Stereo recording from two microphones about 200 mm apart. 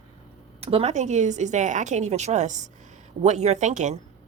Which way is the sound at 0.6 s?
30° right (ahead or behind).